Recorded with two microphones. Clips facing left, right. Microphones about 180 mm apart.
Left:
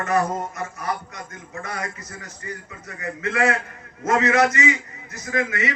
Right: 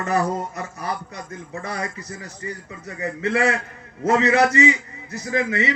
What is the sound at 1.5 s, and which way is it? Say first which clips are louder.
A man's voice: right 2 dB; 35° right (ahead or behind).